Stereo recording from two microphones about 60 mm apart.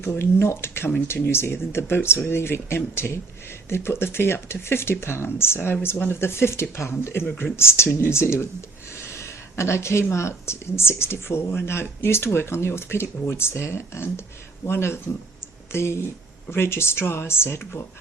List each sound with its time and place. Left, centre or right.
0.0 s speech: left